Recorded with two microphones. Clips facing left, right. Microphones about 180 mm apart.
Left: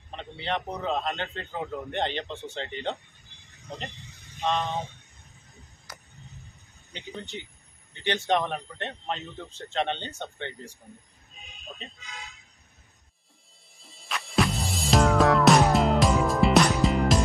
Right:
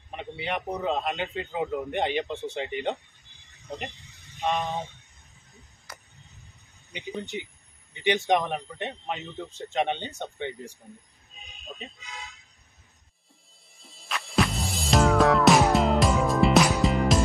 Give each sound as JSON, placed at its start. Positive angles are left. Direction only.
{"t": 0.1, "sound": "a man's voice", "side_deg": -10}
{"t": 4.0, "sound": "a sound", "side_deg": 0}
{"t": 6.9, "sound": "a man's voice", "side_deg": -15}
{"t": 13.8, "sound": "music", "side_deg": 0}